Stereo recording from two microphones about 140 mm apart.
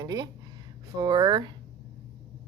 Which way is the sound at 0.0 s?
30° right (ahead or behind).